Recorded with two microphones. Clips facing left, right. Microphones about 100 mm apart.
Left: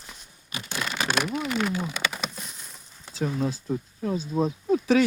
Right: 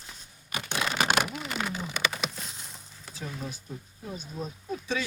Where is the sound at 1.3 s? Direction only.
5° right (ahead or behind).